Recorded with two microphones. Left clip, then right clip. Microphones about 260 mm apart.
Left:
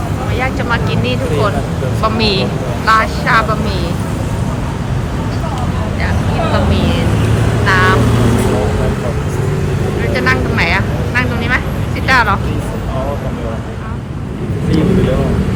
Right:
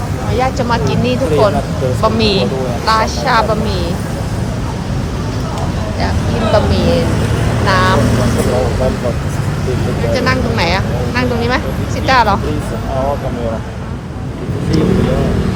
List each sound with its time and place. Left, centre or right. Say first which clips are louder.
0.3 s a woman's voice: right 3 dB; centre
7.7 s a woman's voice: left 1 dB; centre
10.2 s vehicle: left 2 dB; centre
12.0 s a woman's voice: right 1 dB; centre